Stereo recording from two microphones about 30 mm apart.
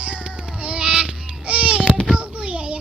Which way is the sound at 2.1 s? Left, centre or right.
Right.